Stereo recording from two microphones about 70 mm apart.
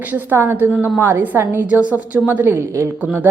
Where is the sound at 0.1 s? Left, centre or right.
Right.